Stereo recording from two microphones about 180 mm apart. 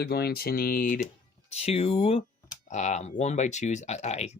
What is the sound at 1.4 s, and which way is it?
Speech, 35° left (ahead or behind).